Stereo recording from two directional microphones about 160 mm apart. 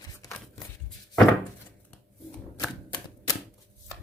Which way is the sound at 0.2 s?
15° left (ahead or behind).